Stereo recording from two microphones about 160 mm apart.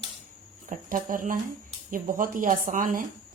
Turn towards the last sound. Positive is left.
turn(degrees=-55)  # may be behind; listen again after turning